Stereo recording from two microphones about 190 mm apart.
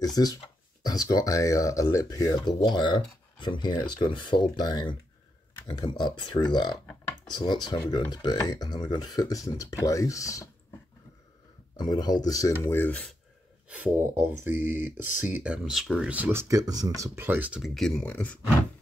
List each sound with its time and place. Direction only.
0.0 s speech: 20° left (ahead or behind)
11.7 s speech: 20° left (ahead or behind)
13.7 s speech: 10° right (ahead or behind); by 18.4 s 10° left (ahead or behind)